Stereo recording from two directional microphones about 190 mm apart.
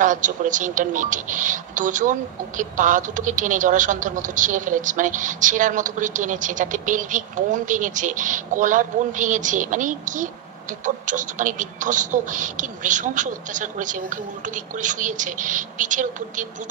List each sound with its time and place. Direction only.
0.0 s speech: 40° right (ahead or behind)